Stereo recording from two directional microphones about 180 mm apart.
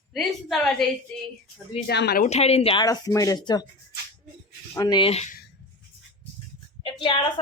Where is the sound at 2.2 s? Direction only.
35° left (ahead or behind).